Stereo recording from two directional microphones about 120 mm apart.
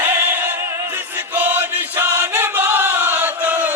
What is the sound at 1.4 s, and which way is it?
Chant, 15° right (ahead or behind).